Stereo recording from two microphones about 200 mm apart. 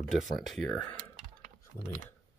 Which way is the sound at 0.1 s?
Centre (ahead or behind).